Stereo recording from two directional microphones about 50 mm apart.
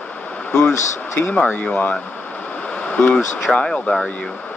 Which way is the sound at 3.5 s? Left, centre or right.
Centre.